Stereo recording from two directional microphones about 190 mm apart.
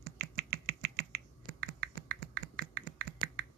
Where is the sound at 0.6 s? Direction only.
65° right (ahead or behind).